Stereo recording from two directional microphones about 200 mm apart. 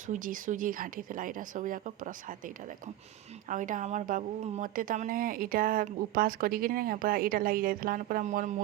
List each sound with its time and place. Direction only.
0.1 s speech: 40° right (ahead or behind)
3.5 s speech: 40° right (ahead or behind)